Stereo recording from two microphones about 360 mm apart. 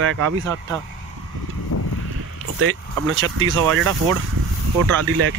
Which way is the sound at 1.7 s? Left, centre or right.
Left.